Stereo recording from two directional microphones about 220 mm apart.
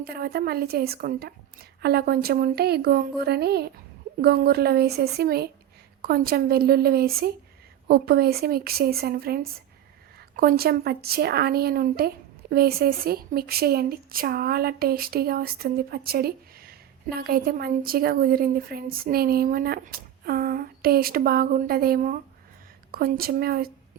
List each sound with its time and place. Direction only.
0.0 s speech: 45° right (ahead or behind)